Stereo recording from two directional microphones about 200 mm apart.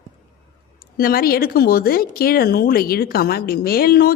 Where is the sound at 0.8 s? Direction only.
45° left (ahead or behind).